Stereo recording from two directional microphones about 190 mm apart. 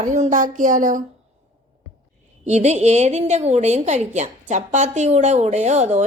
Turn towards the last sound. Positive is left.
turn(degrees=-35)  # may be behind; listen again after turning